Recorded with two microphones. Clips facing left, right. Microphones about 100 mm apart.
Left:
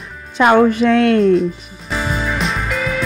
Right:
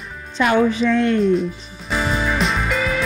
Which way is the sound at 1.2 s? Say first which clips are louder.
Left 4 dB; centre (ahead or behind).